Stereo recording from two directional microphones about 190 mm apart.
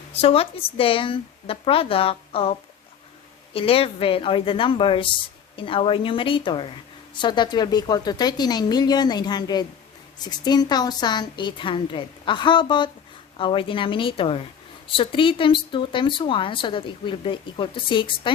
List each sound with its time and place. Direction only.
0.1 s speech: 30° left (ahead or behind)